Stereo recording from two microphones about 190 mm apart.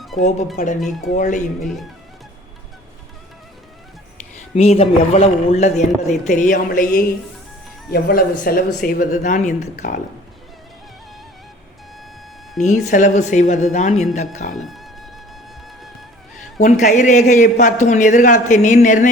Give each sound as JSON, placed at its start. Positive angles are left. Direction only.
{"t": 0.2, "sound": "a man's voice", "side_deg": 35}
{"t": 4.4, "sound": "a man's voice", "side_deg": 35}
{"t": 12.6, "sound": "a man's voice", "side_deg": 40}
{"t": 14.5, "sound": "speech", "side_deg": 0}
{"t": 16.6, "sound": "a man's voice", "side_deg": 40}